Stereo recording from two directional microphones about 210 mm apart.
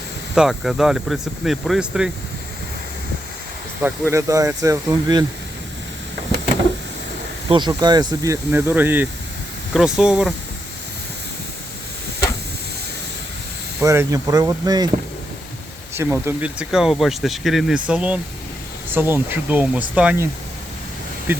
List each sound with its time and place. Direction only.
0.3 s speech: centre (ahead or behind)
4.1 s speech: 15° right (ahead or behind)
7.4 s speech: 20° right (ahead or behind); by 10.3 s 5° right (ahead or behind)
13.8 s speech: 15° right (ahead or behind)
16.0 s speech: 10° right (ahead or behind)
21.3 s speech: 10° right (ahead or behind)